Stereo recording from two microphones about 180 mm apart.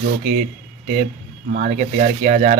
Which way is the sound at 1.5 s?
50° right (ahead or behind).